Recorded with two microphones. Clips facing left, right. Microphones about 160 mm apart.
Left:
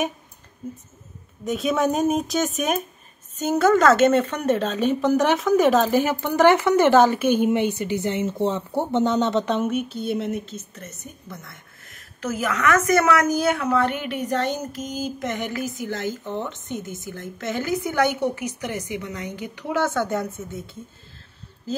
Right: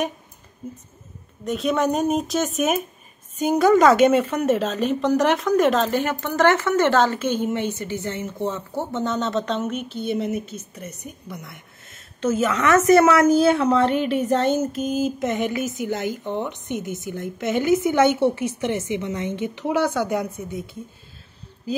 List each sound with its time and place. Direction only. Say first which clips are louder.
1.4 s a woman's voice: even; centre (ahead or behind)
3.3 s a woman's voice: right 2 dB; 15° right (ahead or behind)